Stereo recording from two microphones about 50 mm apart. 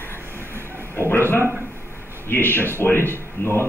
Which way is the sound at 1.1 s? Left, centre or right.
Left.